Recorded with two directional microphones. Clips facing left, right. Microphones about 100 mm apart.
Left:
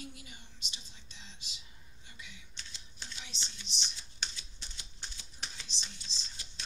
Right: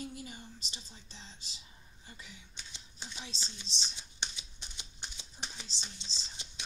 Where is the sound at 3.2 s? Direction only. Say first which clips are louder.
Right 2 dB; 30° right (ahead or behind).